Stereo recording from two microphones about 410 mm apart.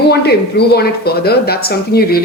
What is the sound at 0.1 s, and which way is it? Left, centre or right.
Speech, left.